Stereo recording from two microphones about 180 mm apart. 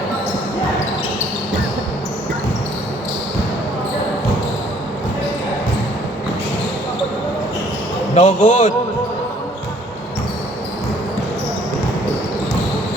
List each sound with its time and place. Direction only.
8.1 s a man's voice: 40° left (ahead or behind)